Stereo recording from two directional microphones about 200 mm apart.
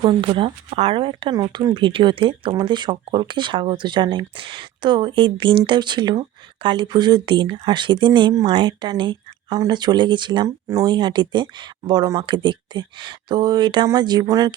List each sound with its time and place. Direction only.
0.0 s speech: 25° right (ahead or behind)